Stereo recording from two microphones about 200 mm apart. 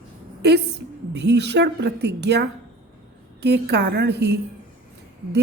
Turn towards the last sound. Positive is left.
turn(degrees=-55)  # may be behind; listen again after turning